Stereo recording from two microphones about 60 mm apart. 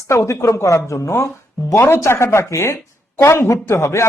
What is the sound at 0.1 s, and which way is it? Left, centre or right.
Speech, left.